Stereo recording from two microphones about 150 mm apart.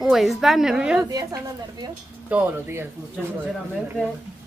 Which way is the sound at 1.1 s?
25° right (ahead or behind).